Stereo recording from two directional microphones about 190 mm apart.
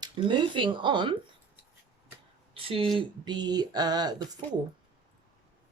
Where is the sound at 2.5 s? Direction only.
30° right (ahead or behind).